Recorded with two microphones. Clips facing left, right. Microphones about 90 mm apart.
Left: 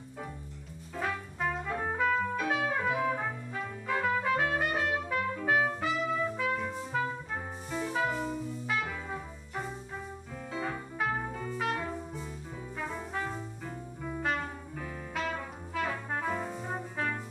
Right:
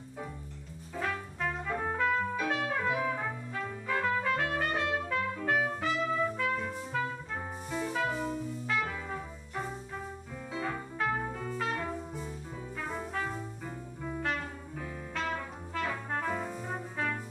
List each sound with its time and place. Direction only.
0.9 s music: 10° left (ahead or behind)
10.6 s music: 10° left (ahead or behind)
15.1 s brass instrument: 10° left (ahead or behind)
16.6 s music: 5° left (ahead or behind)